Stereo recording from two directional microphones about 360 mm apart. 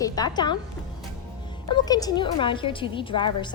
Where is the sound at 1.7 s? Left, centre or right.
Centre.